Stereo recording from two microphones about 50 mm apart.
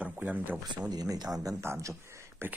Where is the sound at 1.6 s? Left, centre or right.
Right.